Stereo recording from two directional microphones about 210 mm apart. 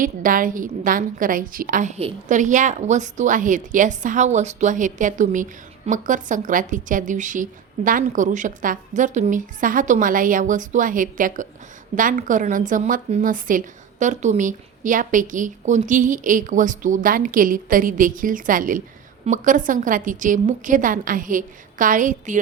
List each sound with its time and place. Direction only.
0.0 s a woman's voice: 40° right (ahead or behind)